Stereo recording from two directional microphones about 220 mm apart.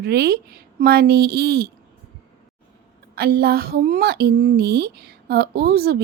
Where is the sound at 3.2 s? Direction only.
45° right (ahead or behind).